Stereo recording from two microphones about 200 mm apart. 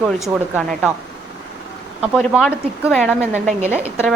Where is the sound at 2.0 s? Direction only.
Centre (ahead or behind).